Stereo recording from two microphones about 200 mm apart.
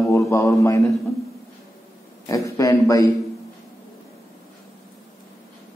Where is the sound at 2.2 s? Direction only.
15° left (ahead or behind).